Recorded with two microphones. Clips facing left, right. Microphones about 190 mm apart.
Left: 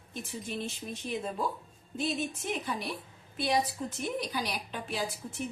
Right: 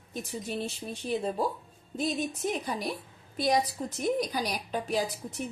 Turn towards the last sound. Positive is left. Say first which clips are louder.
# right 5 dB
turn(degrees=-40)  # may be behind; listen again after turning